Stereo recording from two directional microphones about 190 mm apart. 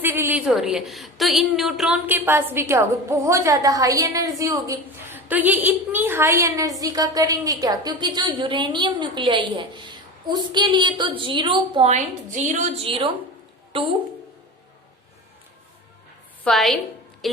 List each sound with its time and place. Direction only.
0.0 s a woman's voice: 10° right (ahead or behind); by 13.9 s 30° right (ahead or behind)
16.4 s a woman's voice: centre (ahead or behind)